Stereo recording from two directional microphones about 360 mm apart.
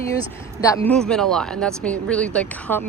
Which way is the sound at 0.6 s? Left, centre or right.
Centre.